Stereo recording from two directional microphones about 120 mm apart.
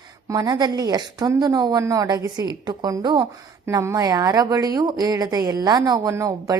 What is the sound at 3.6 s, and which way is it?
Speech, 25° right (ahead or behind).